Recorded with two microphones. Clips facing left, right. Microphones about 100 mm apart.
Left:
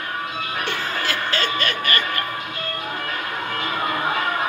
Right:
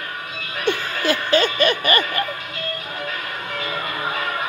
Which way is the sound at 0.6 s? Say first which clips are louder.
Right 7 dB; 15° right (ahead or behind).